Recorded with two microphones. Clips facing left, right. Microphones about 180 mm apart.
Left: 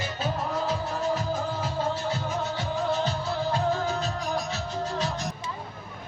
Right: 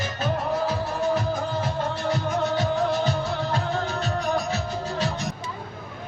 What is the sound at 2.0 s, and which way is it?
Music, 80° right.